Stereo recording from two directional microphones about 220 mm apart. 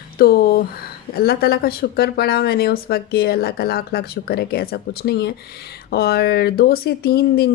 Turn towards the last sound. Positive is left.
turn(degrees=45)  # may be behind; listen again after turning